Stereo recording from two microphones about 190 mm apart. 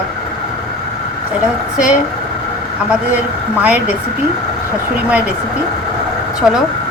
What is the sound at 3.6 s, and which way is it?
Speech, 5° right (ahead or behind).